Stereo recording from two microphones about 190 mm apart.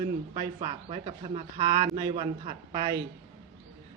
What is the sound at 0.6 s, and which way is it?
Speech, 30° right (ahead or behind).